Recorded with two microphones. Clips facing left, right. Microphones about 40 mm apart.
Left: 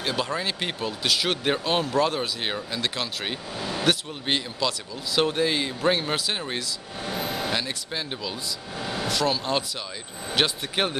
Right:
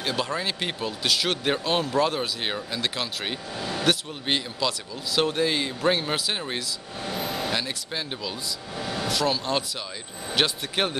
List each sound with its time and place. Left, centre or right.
0.0 s speech: centre
7.0 s vehicle: left
7.4 s speech: centre